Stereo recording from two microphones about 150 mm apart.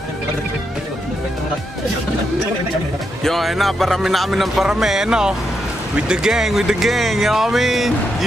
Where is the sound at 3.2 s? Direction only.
Centre (ahead or behind).